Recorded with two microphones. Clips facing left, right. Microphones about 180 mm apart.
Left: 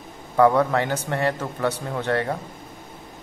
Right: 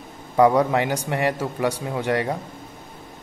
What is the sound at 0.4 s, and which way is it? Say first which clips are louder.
Speech: right 1 dB; 15° right (ahead or behind).